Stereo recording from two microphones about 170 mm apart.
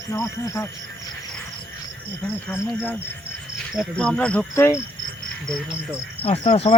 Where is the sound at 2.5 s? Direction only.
15° left (ahead or behind).